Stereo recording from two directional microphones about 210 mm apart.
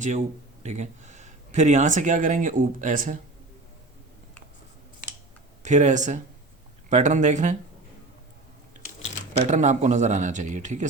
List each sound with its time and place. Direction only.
0.0 s speech: 35° right (ahead or behind)
5.6 s speech: 35° right (ahead or behind)
9.4 s speech: 35° right (ahead or behind)